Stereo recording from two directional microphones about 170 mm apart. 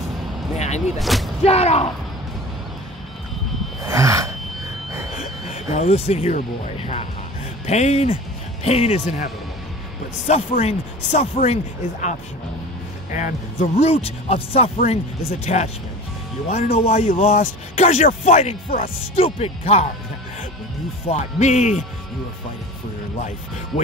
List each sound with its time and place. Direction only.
0.6 s a sound: 40° left (ahead or behind)
0.9 s speech: centre (ahead or behind)
1.4 s speech: 35° left (ahead or behind)
3.8 s gasp: 20° right (ahead or behind)
5.1 s a sound: 40° left (ahead or behind)
7.6 s speech: 40° left (ahead or behind)
16.7 s speech: 35° left (ahead or behind)
21.1 s speech: 40° left (ahead or behind)